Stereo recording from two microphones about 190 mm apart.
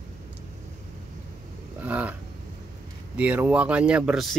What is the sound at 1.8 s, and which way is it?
Speech, 10° right (ahead or behind).